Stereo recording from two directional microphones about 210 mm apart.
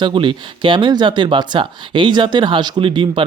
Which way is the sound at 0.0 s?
25° right (ahead or behind).